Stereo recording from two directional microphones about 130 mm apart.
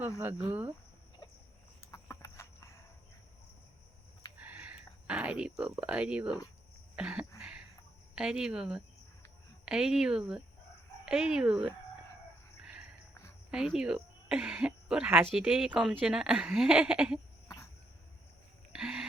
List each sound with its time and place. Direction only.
0.4 s speech: 15° right (ahead or behind)
1.8 s cricket: 25° left (ahead or behind)
4.4 s a sound: 15° right (ahead or behind)
5.0 s speech: 10° right (ahead or behind)
6.9 s cough: 10° right (ahead or behind)
8.1 s speech: 5° right (ahead or behind)
12.6 s a sound: 5° right (ahead or behind)
13.5 s speech: 5° right (ahead or behind)
18.7 s a sound: 5° right (ahead or behind)